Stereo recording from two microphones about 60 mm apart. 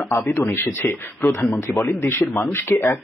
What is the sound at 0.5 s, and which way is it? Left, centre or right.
Speech, left.